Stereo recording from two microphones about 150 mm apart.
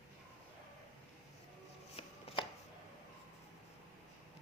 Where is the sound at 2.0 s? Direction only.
40° left (ahead or behind).